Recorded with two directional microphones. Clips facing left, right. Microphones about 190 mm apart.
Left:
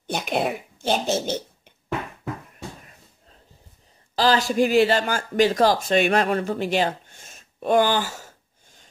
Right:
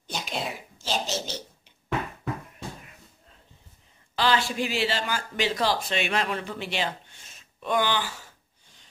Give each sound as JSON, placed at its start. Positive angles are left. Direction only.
{"t": 0.0, "sound": "a woman's voice", "side_deg": 55}
{"t": 4.1, "sound": "speech", "side_deg": 40}